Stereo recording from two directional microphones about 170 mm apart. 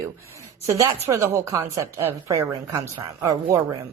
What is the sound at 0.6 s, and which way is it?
A woman's voice, 15° right (ahead or behind).